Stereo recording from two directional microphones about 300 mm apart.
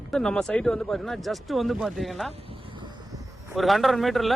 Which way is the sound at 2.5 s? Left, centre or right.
Centre.